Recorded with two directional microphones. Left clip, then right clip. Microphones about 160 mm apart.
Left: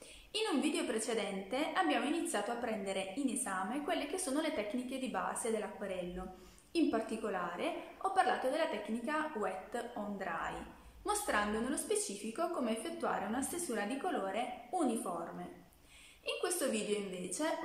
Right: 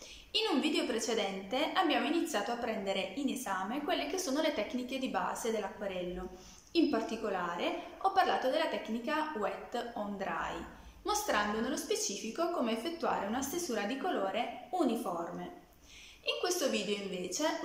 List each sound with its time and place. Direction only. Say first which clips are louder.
0.3 s a woman's voice: right 4 dB; centre (ahead or behind)
16.3 s a woman's voice: right 4 dB; centre (ahead or behind)